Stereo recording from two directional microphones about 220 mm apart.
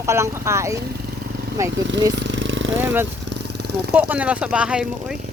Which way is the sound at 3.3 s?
50° right (ahead or behind).